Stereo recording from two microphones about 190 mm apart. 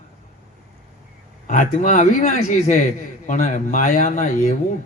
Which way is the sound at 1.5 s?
45° left (ahead or behind).